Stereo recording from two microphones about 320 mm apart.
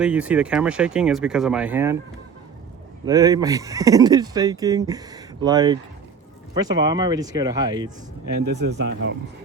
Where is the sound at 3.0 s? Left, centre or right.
Centre.